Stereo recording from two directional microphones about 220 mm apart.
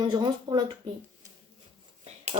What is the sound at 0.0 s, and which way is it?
Speech, 20° right (ahead or behind).